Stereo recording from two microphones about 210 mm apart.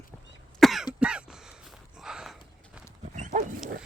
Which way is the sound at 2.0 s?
Centre (ahead or behind).